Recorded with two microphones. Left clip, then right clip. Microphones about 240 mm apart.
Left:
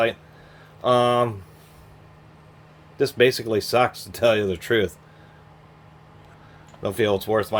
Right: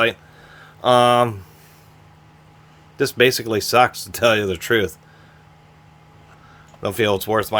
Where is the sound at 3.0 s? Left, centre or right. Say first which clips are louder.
Right 2 dB; right.